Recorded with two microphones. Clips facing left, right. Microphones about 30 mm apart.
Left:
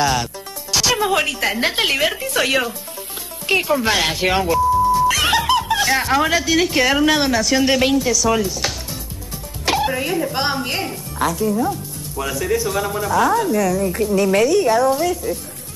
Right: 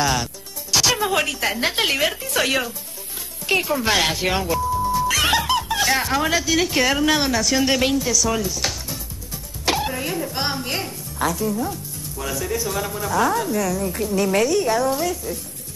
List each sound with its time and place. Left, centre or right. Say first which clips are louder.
0.7 s music: left 1 dB; centre
0.9 s a woman's voice: left 3 dB; centre
4.2 s a woman's voice: left 4 dB; centre
4.5 s music: left 6 dB; centre
5.8 s snicker: left 2 dB; centre
6.0 s a woman's voice: left 4 dB; centre
9.8 s a woman's voice: left 5 dB; centre
11.2 s a woman's voice: left 4 dB; centre